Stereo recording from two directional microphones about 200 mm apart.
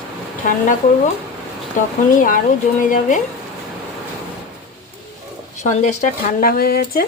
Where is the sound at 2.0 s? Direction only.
40° left (ahead or behind).